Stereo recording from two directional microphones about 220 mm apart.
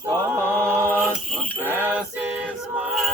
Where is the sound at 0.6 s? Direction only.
10° right (ahead or behind).